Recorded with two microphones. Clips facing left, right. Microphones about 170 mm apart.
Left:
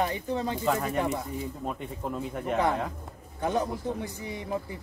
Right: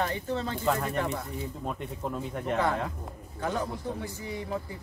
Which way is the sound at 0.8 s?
5° left (ahead or behind).